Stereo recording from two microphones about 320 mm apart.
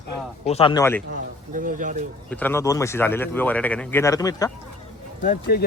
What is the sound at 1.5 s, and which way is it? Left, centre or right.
Speech, right.